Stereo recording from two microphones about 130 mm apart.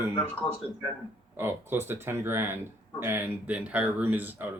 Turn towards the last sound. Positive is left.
turn(degrees=-15)  # may be behind; listen again after turning